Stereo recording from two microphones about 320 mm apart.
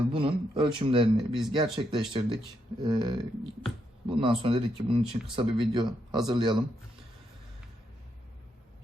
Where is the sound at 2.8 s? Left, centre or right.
Centre.